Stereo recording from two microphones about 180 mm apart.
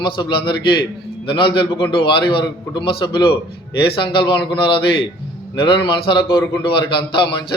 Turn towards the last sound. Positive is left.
turn(degrees=25)  # may be behind; listen again after turning